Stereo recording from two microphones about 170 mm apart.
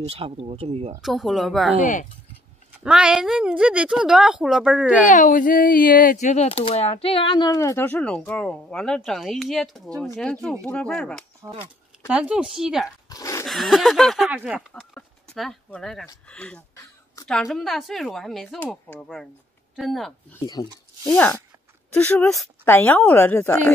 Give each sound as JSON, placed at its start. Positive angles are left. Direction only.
{"t": 0.0, "sound": "speech", "side_deg": -35}
{"t": 1.0, "sound": "a woman's voice", "side_deg": 0}
{"t": 2.8, "sound": "a woman's voice", "side_deg": -5}
{"t": 5.0, "sound": "speech", "side_deg": 50}
{"t": 9.8, "sound": "speech", "side_deg": -20}
{"t": 10.1, "sound": "a woman's voice", "side_deg": 0}
{"t": 12.1, "sound": "a woman's voice", "side_deg": -5}
{"t": 13.1, "sound": "a sound", "side_deg": 20}
{"t": 13.5, "sound": "a woman's voice", "side_deg": 0}
{"t": 16.7, "sound": "a sound", "side_deg": 20}
{"t": 17.3, "sound": "a woman's voice", "side_deg": 0}
{"t": 20.6, "sound": "speech", "side_deg": 25}
{"t": 21.1, "sound": "speech", "side_deg": 10}